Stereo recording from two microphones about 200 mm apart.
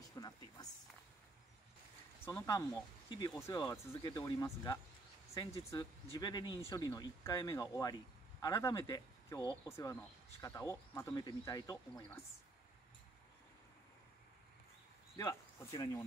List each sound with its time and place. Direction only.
0.1 s speech: 20° left (ahead or behind)
2.2 s speech: 15° left (ahead or behind)
15.1 s speech: 20° left (ahead or behind)